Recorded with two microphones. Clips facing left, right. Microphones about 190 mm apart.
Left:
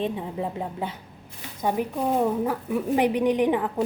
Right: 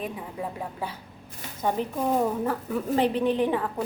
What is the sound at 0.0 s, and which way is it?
Speech, 25° left (ahead or behind).